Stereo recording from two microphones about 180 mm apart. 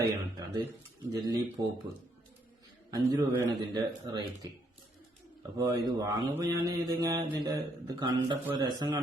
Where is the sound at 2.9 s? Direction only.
20° right (ahead or behind).